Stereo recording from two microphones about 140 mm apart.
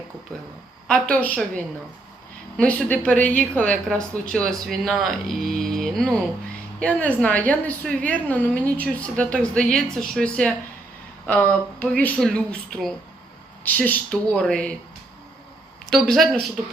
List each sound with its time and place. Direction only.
0.9 s a woman's voice: 10° left (ahead or behind)
2.6 s a woman's voice: 10° left (ahead or behind)
15.9 s a woman's voice: centre (ahead or behind)